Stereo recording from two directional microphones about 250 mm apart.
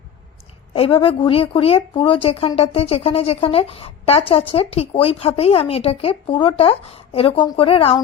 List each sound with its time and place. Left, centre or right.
0.7 s speech: left